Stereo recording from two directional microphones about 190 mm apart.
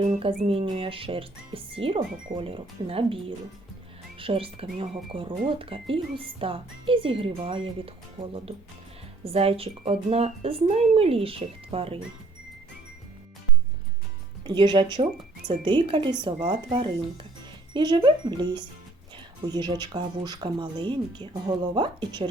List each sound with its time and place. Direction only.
0.1 s speech: 30° right (ahead or behind)
14.4 s speech: 25° right (ahead or behind)